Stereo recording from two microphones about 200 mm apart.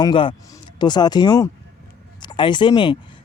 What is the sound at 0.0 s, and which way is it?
Speech, 25° left (ahead or behind).